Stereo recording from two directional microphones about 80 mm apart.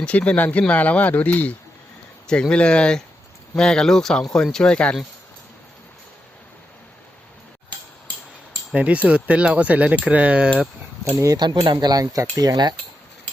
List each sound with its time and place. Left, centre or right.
0.0 s speech: centre
8.7 s speech: centre
11.3 s speech: right